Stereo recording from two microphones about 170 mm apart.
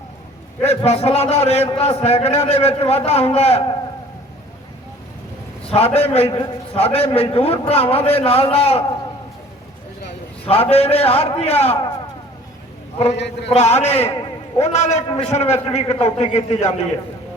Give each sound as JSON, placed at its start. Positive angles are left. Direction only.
{"t": 0.6, "sound": "a man's voice", "side_deg": 40}
{"t": 5.6, "sound": "a man's voice", "side_deg": 35}
{"t": 10.4, "sound": "a man's voice", "side_deg": 35}
{"t": 13.1, "sound": "a man's voice", "side_deg": 90}
{"t": 13.5, "sound": "a man's voice", "side_deg": 40}
{"t": 15.0, "sound": "a man's voice", "side_deg": 30}
{"t": 15.3, "sound": "a man's voice", "side_deg": 40}